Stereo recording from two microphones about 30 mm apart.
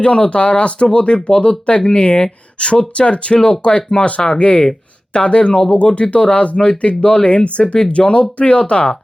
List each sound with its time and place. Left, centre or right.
0.0 s speech: left